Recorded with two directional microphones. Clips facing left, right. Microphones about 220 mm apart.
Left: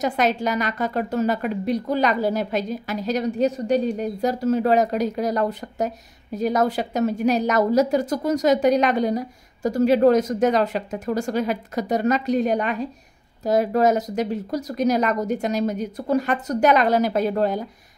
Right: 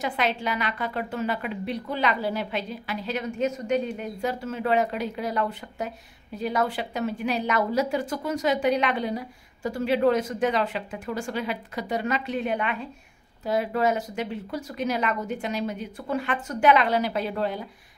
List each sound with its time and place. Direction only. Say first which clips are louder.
0.0 s a woman's voice: left 6 dB; 40° left (ahead or behind)